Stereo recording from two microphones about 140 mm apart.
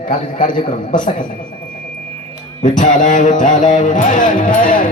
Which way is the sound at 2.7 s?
65° left (ahead or behind).